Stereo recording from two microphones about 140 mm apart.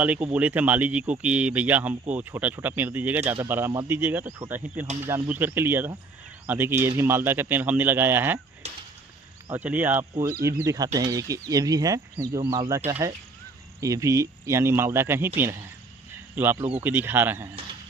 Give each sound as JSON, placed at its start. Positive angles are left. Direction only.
{"t": 0.0, "sound": "speech", "side_deg": -10}
{"t": 8.6, "sound": "whip", "side_deg": -50}
{"t": 9.5, "sound": "speech", "side_deg": -10}
{"t": 16.3, "sound": "speech", "side_deg": -15}